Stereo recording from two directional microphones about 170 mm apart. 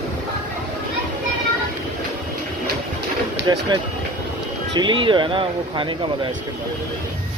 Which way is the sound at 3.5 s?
20° right (ahead or behind).